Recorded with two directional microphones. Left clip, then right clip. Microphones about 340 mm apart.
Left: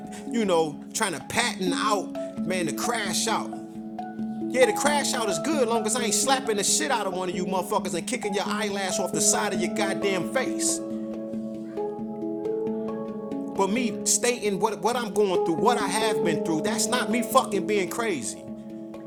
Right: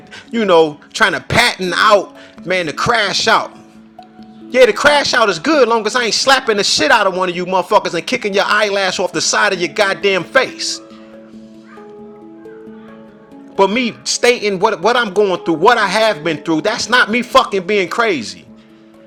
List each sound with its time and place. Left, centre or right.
0.3 s speech: left
4.5 s speech: left
13.6 s a man's voice: left